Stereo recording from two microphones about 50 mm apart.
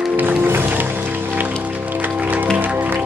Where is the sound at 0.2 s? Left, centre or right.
Right.